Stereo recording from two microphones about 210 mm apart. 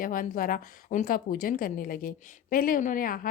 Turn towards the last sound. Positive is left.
turn(degrees=40)  # may be behind; listen again after turning